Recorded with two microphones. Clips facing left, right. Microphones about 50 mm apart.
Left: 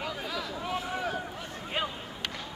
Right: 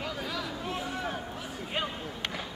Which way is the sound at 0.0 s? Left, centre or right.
Centre.